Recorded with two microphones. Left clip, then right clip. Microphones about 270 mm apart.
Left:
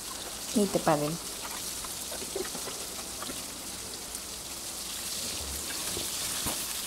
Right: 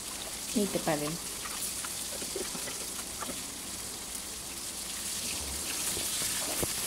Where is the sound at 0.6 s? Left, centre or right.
Centre.